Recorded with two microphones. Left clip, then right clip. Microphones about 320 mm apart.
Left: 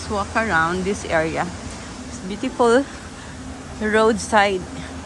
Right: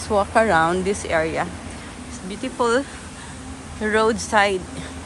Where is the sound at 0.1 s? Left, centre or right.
Centre.